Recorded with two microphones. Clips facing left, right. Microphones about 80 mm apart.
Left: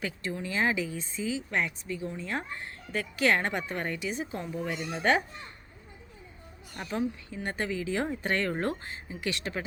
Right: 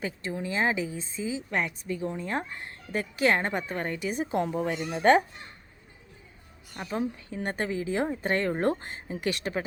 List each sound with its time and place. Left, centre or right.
0.0 s speech: right
4.1 s a woman's voice: right
6.9 s speech: right